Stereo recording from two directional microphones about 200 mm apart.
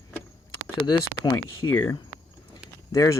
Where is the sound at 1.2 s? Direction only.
20° left (ahead or behind).